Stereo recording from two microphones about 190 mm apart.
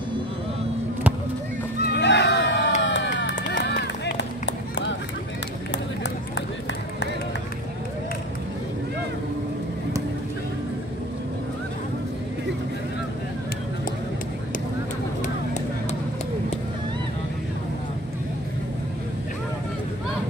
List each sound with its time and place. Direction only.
1.8 s crowd: 65° left (ahead or behind)
2.8 s run: 70° left (ahead or behind)
15.2 s vehicle: 40° left (ahead or behind)